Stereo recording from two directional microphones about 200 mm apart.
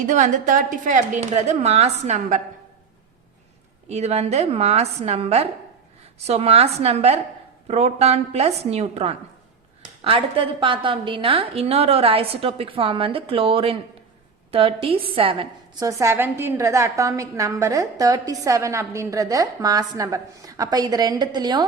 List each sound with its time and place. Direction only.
0.0 s a woman's voice: 40° right (ahead or behind)
3.8 s a woman's voice: 35° right (ahead or behind)